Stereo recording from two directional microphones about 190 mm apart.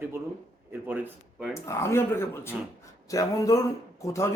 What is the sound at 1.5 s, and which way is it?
Speech, 15° left (ahead or behind).